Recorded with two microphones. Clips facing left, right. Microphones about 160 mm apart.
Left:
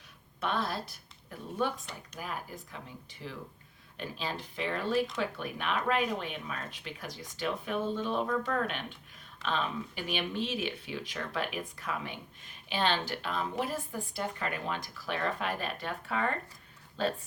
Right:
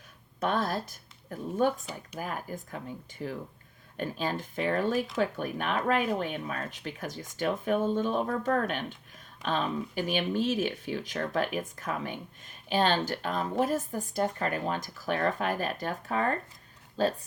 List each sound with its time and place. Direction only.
0.3 s speech: 45° right (ahead or behind)